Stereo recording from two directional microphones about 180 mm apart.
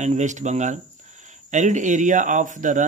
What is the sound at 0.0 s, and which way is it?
Speech, 45° right (ahead or behind).